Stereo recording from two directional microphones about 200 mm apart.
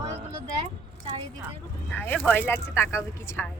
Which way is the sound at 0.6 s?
25° right (ahead or behind).